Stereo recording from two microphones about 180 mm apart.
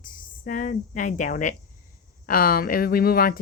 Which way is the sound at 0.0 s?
50° left (ahead or behind).